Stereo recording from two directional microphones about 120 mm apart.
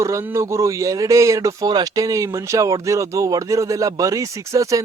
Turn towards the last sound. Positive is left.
turn(degrees=-25)  # may be behind; listen again after turning